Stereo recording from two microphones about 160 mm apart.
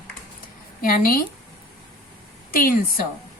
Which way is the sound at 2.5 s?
60° left (ahead or behind).